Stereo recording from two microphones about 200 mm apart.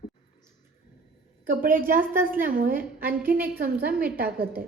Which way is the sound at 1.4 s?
45° right (ahead or behind).